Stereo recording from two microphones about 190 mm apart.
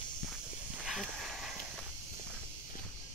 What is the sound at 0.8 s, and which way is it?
Snake, centre (ahead or behind).